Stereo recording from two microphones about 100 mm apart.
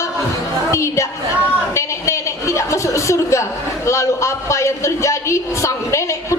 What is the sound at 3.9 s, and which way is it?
A woman's voice, 30° left (ahead or behind).